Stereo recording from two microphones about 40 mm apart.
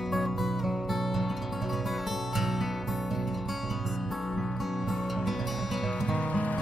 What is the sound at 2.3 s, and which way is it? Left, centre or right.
Music, centre.